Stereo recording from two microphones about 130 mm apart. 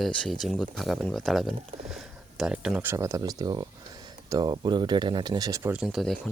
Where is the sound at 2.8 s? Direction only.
25° right (ahead or behind).